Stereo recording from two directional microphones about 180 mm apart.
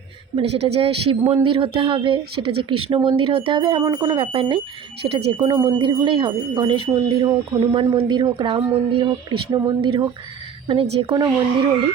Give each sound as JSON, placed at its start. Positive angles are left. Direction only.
{"t": 0.3, "sound": "speech", "side_deg": -35}